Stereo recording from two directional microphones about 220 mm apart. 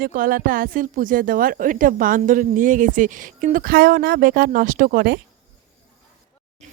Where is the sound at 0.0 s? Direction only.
40° right (ahead or behind).